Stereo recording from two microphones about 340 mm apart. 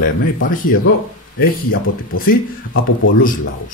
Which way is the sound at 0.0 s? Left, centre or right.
Left.